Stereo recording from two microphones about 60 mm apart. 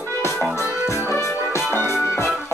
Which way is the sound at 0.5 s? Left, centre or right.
Left.